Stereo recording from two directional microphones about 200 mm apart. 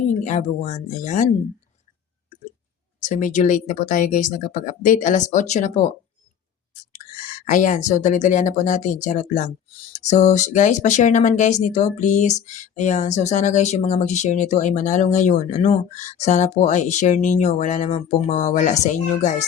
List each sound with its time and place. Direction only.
0.2 s speech: 40° left (ahead or behind)
3.0 s speech: 40° left (ahead or behind)
6.9 s speech: 40° left (ahead or behind)